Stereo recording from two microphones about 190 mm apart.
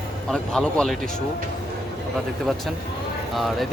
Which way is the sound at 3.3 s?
Centre (ahead or behind).